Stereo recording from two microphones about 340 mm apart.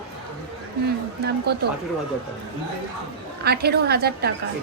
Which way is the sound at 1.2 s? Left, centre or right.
Right.